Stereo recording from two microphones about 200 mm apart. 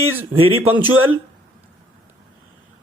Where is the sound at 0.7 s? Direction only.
90° right.